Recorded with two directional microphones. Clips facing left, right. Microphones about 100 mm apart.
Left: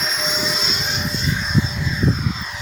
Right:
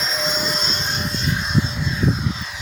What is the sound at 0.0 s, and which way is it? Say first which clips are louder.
Vehicle: even; centre (ahead or behind).